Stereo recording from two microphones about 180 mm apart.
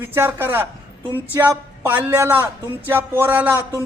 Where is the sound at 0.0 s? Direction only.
10° right (ahead or behind).